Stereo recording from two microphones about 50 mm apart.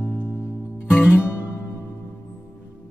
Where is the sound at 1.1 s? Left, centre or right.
Left.